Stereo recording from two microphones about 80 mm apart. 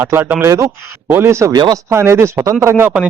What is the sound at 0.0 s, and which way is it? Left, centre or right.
Speech, right.